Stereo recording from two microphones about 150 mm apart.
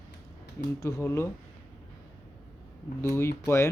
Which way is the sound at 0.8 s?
15° left (ahead or behind).